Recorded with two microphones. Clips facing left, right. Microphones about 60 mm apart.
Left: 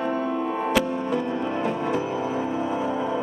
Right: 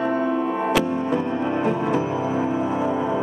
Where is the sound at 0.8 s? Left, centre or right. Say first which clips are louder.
Right 3 dB; right.